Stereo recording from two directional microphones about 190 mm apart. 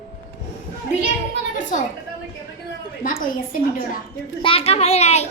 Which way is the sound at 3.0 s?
45° left (ahead or behind).